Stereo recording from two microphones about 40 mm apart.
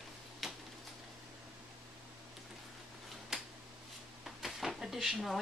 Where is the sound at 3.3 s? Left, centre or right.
Centre.